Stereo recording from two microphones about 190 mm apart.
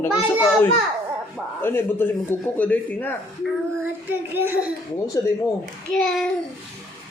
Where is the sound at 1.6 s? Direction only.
10° left (ahead or behind).